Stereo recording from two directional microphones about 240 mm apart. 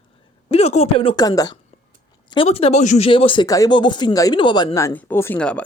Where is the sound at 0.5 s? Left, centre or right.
Left.